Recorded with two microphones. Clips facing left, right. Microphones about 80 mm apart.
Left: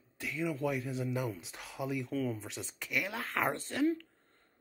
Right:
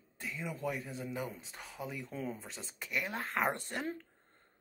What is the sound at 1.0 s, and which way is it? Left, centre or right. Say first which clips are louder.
Speech: left 4 dB; centre.